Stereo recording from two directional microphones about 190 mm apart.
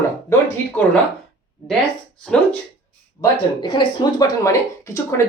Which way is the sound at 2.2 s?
5° left (ahead or behind).